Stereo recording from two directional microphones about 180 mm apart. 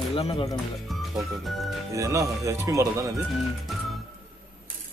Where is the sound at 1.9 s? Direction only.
15° right (ahead or behind).